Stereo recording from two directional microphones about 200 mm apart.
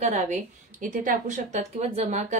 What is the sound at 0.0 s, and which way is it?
A woman's voice, 35° right (ahead or behind).